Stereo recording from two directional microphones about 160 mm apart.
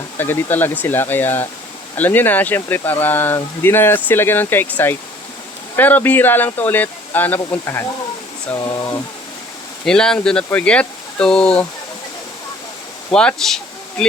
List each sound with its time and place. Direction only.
0.2 s speech: 10° left (ahead or behind)
5.7 s speech: 10° left (ahead or behind)
8.5 s speech: 25° left (ahead or behind)
9.8 s speech: 5° left (ahead or behind)
13.1 s speech: 5° left (ahead or behind)